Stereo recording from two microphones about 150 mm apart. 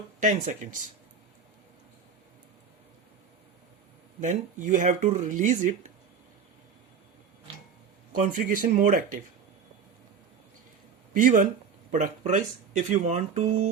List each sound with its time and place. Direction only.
0.2 s speech: 60° right (ahead or behind)
4.2 s speech: 60° right (ahead or behind)
8.2 s speech: 65° right (ahead or behind)
11.1 s speech: 65° right (ahead or behind); by 13.7 s 50° right (ahead or behind)